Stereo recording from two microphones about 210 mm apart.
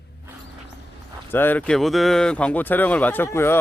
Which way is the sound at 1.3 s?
10° left (ahead or behind).